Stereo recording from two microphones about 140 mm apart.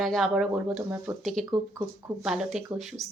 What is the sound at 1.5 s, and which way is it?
Speech, 20° right (ahead or behind).